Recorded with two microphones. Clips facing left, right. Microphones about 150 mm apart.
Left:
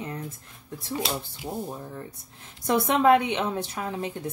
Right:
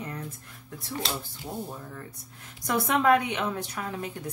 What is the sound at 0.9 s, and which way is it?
Speech, 10° left (ahead or behind).